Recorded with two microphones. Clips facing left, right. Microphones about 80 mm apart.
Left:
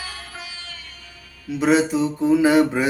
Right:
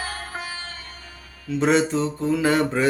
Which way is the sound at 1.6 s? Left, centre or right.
Centre.